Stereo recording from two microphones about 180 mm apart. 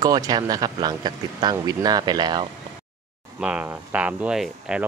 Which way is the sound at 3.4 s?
5° right (ahead or behind).